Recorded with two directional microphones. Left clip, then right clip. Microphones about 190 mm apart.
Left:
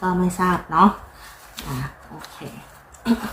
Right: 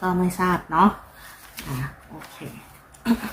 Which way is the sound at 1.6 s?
10° right (ahead or behind).